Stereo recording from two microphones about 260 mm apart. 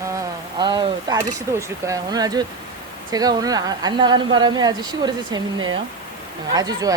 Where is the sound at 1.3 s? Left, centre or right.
Centre.